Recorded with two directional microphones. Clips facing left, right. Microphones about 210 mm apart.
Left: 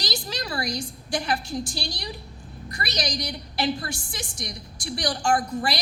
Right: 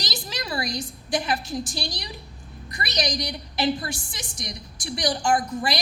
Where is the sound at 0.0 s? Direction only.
20° right (ahead or behind).